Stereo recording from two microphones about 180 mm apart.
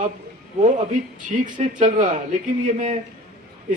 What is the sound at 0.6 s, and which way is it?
A man's voice, 45° right (ahead or behind).